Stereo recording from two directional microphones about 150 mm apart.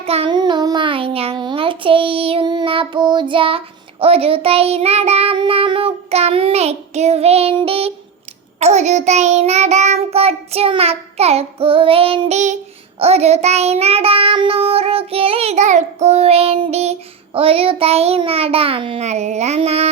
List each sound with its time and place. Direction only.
0.0 s child singing: 40° right (ahead or behind)
0.3 s child singing: 30° right (ahead or behind)